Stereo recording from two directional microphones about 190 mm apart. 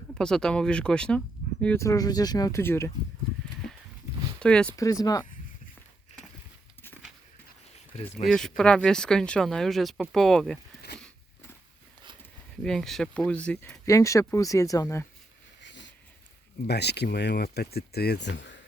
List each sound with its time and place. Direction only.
0.1 s speech: 5° left (ahead or behind)
4.4 s speech: 5° left (ahead or behind)
4.8 s speech: 20° left (ahead or behind)
7.9 s speech: 35° left (ahead or behind)
8.3 s speech: 5° left (ahead or behind)
12.6 s speech: centre (ahead or behind)
15.6 s a sound: 70° left (ahead or behind)
16.6 s speech: 60° left (ahead or behind)